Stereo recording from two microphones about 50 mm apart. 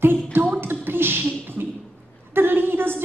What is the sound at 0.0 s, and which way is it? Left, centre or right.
Speech, right.